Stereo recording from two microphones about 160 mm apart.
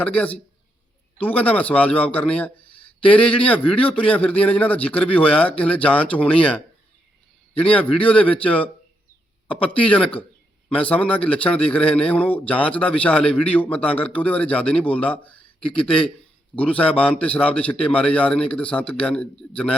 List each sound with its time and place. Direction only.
0.0 s speech: 10° left (ahead or behind)
7.6 s speech: 10° left (ahead or behind)